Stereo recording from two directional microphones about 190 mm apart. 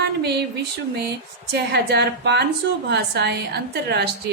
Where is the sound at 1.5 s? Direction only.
60° right (ahead or behind).